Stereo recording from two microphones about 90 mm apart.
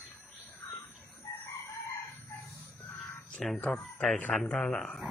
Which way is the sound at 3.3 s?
5° left (ahead or behind).